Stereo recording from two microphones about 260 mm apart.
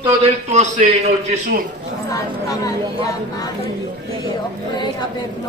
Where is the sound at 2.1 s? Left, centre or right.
Centre.